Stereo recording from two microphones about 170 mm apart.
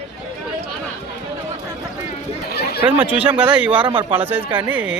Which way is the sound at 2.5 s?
70° left (ahead or behind).